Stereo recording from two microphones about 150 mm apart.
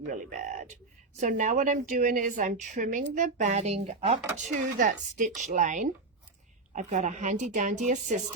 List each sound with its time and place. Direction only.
0.1 s a woman's voice: 60° right (ahead or behind); by 4.2 s 45° right (ahead or behind)
4.4 s a woman's voice: 60° right (ahead or behind)